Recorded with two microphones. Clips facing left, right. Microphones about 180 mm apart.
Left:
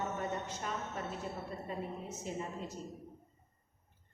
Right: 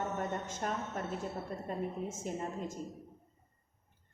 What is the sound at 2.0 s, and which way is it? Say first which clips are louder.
Speech: right 3 dB; 50° right (ahead or behind).